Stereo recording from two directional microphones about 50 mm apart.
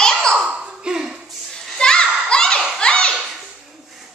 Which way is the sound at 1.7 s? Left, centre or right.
Centre.